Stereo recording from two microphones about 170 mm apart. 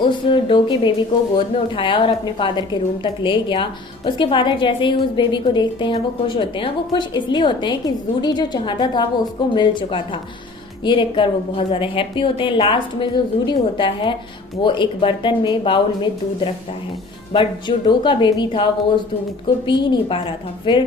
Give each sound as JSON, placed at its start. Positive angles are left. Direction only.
{"t": 0.0, "sound": "a woman's voice", "side_deg": 30}